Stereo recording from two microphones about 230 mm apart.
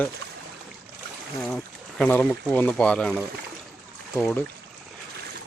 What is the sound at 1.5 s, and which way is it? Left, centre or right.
Speech, centre.